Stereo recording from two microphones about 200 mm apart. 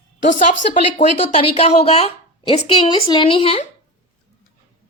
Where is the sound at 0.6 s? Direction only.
35° left (ahead or behind).